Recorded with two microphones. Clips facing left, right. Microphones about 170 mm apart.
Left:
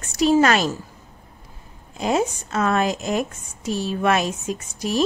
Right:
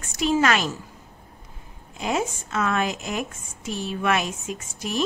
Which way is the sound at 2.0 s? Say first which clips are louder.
Left 4 dB; 35° left (ahead or behind).